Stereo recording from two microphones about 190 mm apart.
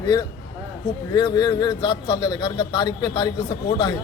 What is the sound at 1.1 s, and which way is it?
A man's voice, 20° left (ahead or behind).